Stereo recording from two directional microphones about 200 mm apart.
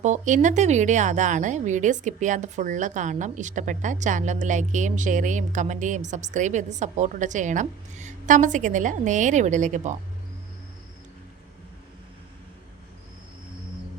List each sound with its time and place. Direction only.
0.0 s speech: 35° right (ahead or behind)